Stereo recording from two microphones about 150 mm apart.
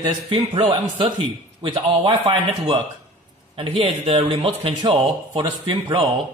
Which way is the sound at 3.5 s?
35° right (ahead or behind).